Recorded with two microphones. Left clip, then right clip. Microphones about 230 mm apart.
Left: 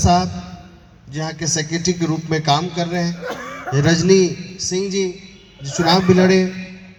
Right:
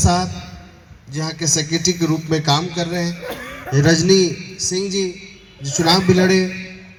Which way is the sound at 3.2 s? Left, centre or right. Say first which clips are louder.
Left 2 dB; left.